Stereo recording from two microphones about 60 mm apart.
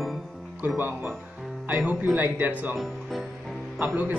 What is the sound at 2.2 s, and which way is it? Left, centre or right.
Speech, right.